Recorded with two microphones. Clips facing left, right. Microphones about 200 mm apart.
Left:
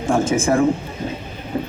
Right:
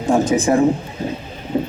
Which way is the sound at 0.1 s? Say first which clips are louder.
Right 2 dB; 20° right (ahead or behind).